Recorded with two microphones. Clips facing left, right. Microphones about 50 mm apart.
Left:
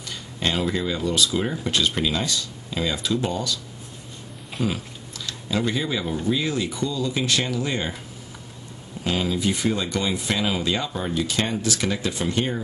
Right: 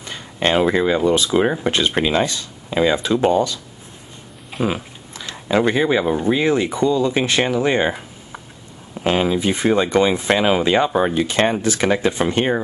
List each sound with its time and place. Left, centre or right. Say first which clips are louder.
0.0 s speech: right 6 dB; right
4.6 s a sound: right 6 dB; right
5.5 s speech: right 9 dB; right